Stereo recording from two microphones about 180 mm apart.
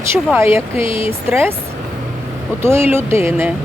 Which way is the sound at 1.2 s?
10° right (ahead or behind).